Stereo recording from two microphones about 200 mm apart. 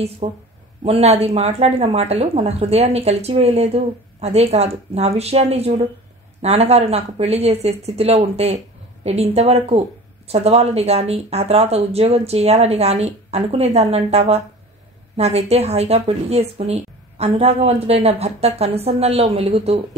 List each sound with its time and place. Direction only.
0.2 s speech: 35° right (ahead or behind)